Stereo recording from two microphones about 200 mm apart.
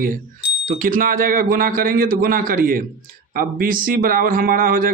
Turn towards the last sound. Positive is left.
turn(degrees=-45)  # may be behind; listen again after turning